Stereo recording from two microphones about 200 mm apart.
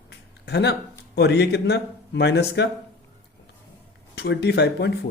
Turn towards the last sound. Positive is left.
turn(degrees=55)  # may be behind; listen again after turning